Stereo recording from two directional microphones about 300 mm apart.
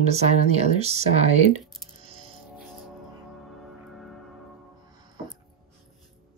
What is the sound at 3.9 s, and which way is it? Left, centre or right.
Church bell, centre.